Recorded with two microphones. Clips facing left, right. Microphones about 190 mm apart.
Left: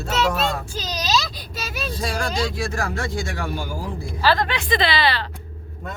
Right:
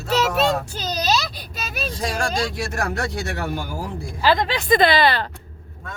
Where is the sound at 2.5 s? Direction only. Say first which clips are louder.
Even; 70° right (ahead or behind).